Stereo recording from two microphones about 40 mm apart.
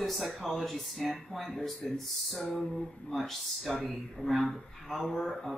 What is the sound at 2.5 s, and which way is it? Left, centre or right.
Speech, centre.